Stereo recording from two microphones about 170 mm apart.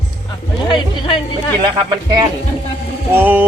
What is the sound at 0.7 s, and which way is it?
Speech, 30° left (ahead or behind).